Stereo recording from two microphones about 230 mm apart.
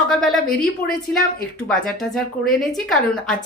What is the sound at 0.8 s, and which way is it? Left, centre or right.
Speech, left.